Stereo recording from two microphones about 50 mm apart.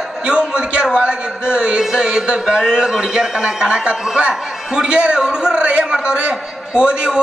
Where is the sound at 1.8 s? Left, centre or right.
Centre.